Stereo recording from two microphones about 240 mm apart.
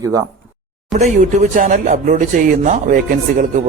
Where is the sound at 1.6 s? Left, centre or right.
Right.